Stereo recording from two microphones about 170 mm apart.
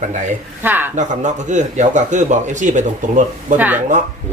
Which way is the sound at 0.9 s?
45° right (ahead or behind).